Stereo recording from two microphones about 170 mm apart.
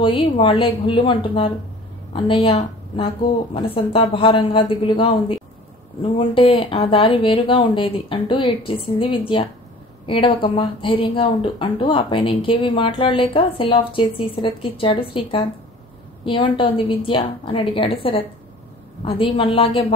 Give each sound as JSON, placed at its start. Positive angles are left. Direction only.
{"t": 0.2, "sound": "speech", "side_deg": 30}
{"t": 6.1, "sound": "speech", "side_deg": 30}